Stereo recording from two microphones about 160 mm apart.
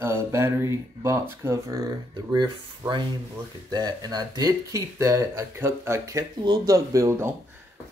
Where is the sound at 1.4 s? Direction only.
20° right (ahead or behind).